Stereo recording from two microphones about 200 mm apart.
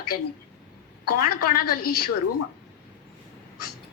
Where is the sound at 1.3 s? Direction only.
45° left (ahead or behind).